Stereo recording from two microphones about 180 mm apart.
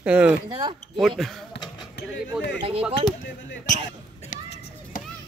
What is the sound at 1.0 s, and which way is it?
Speech, centre (ahead or behind).